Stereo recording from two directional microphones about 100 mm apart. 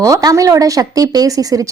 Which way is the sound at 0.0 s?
40° right (ahead or behind).